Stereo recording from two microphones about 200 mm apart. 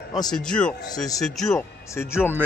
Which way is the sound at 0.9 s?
20° left (ahead or behind).